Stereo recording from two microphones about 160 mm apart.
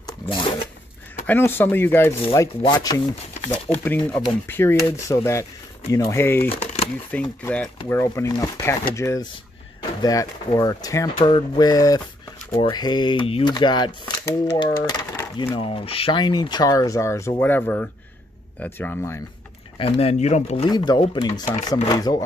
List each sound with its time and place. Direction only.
0.0 s zipper: 30° left (ahead or behind)
1.2 s speech: 10° left (ahead or behind)
2.6 s speech: 25° left (ahead or behind)
3.4 s speech: 10° left (ahead or behind)
6.5 s a sound: 40° left (ahead or behind)
7.1 s speech: 10° left (ahead or behind)
19.8 s speech: 40° left (ahead or behind)
20.7 s speech: 25° left (ahead or behind)